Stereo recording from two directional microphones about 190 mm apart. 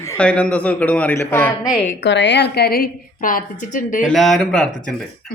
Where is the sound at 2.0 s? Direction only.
65° left (ahead or behind); by 4.0 s 45° left (ahead or behind).